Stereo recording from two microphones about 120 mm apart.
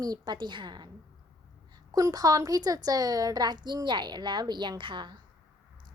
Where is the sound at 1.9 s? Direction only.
30° right (ahead or behind).